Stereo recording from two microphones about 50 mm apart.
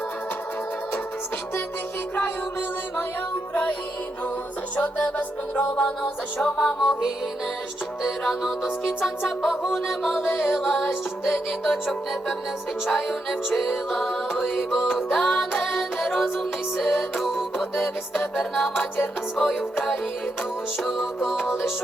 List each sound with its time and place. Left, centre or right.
4.8 s music: left
5.7 s music: centre
6.6 s music: centre
8.0 s music: centre
17.2 s music: centre